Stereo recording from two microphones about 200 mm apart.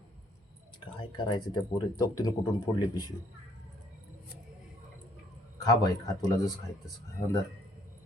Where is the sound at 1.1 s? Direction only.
20° left (ahead or behind).